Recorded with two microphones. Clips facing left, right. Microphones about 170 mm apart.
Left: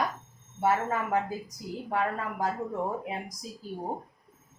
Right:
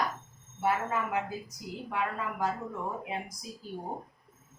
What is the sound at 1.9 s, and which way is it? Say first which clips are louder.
Speech: left 3 dB; 40° left (ahead or behind).